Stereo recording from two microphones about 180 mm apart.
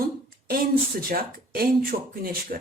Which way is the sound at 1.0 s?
55° right (ahead or behind).